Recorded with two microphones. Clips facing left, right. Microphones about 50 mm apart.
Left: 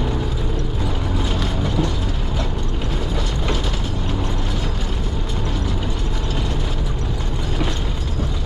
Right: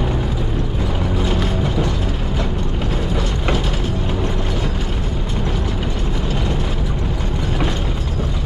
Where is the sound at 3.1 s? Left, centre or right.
Centre.